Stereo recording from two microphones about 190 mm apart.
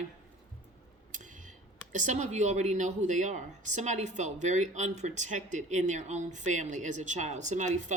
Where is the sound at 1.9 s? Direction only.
40° right (ahead or behind).